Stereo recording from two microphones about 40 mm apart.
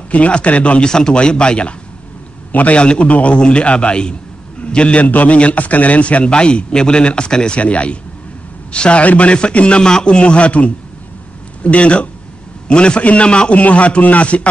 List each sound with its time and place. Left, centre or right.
0.1 s a man's voice: left
0.8 s a man's voice: centre
2.5 s a man's voice: left
2.8 s a man's voice: left
3.1 s a man's voice: left
3.3 s a man's voice: left